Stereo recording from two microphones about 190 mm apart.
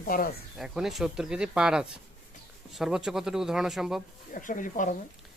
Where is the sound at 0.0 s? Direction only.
50° left (ahead or behind).